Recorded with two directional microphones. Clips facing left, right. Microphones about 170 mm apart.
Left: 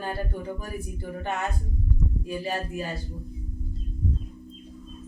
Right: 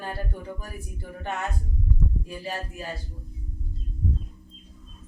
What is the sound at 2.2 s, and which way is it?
Speech, 15° left (ahead or behind).